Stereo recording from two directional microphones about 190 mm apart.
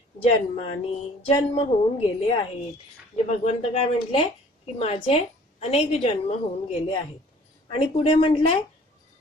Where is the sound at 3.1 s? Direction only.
35° left (ahead or behind).